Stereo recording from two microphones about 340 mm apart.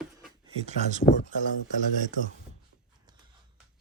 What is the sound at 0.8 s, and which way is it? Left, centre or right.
Speech, right.